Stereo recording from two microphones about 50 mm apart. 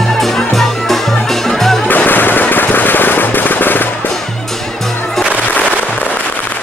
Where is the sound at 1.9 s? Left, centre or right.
Left.